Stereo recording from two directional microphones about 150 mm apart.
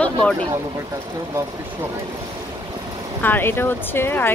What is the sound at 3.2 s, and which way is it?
Speech, 15° left (ahead or behind).